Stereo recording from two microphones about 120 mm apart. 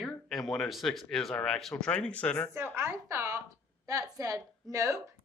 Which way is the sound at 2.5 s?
20° right (ahead or behind).